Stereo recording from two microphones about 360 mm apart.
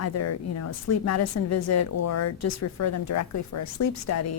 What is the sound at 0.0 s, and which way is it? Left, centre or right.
Speech, left.